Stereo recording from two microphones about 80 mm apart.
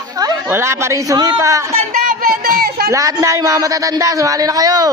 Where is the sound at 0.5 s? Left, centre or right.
Right.